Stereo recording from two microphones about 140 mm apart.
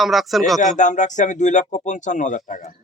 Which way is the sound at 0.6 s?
60° left (ahead or behind).